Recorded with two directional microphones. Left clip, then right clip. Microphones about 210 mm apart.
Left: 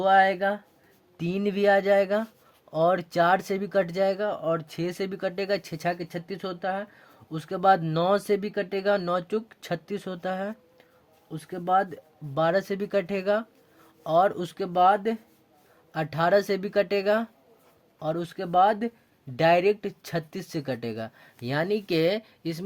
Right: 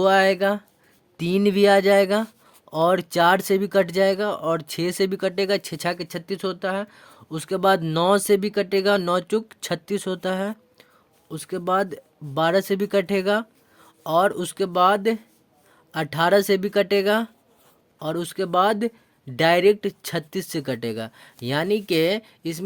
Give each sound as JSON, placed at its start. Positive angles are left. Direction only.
{"t": 0.0, "sound": "speech", "side_deg": -50}